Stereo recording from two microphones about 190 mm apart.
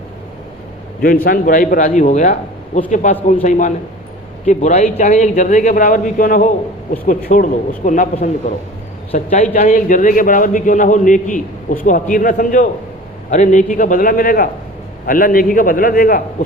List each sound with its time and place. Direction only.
1.0 s a man's voice: 50° left (ahead or behind)
4.4 s a man's voice: 40° left (ahead or behind)